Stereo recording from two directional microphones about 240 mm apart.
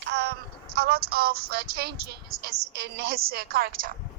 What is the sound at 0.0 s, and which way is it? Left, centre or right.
Music, right.